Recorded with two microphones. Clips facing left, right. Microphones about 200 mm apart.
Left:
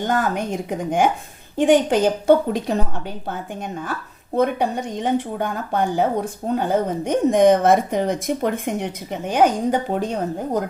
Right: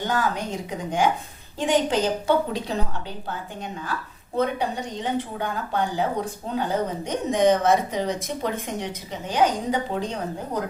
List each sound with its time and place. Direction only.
0.1 s a woman's voice: 55° left (ahead or behind)
4.4 s a woman's voice: 50° left (ahead or behind)